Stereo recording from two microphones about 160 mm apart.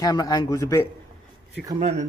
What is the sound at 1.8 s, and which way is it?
Speech, 45° right (ahead or behind).